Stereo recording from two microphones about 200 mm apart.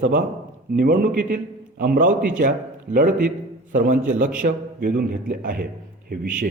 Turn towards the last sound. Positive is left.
turn(degrees=-50)  # may be behind; listen again after turning